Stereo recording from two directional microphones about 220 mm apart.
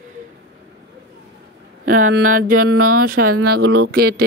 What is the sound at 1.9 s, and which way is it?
Speech, 35° right (ahead or behind).